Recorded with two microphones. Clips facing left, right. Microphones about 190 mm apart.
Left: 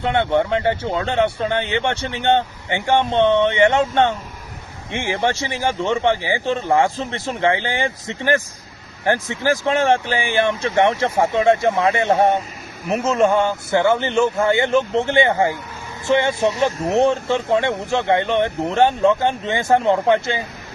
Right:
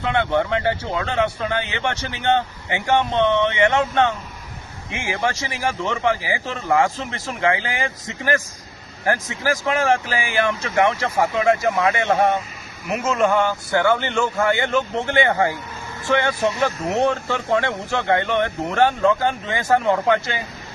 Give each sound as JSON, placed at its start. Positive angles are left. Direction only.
{"t": 0.0, "sound": "speech", "side_deg": 25}